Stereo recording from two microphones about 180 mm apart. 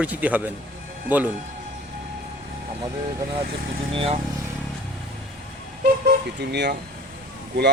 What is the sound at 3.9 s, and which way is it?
Speech, 30° right (ahead or behind).